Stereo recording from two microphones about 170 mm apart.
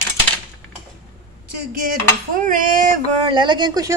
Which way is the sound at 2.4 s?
50° right (ahead or behind).